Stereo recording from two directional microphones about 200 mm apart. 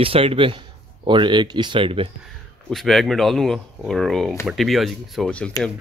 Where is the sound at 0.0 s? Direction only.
30° right (ahead or behind).